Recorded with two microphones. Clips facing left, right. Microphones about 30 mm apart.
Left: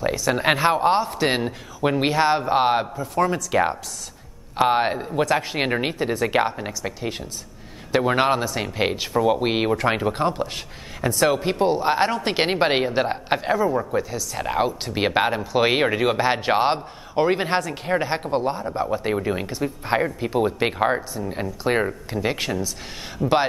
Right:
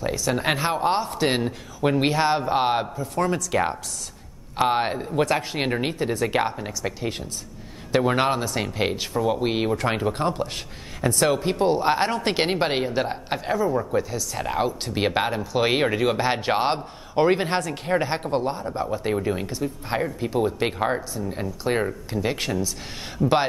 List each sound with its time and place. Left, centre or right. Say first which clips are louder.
0.0 s speech: left 3 dB; centre
6.8 s speech: right 3 dB; centre
9.8 s speech: left 2 dB; centre
12.4 s speech: left 5 dB; centre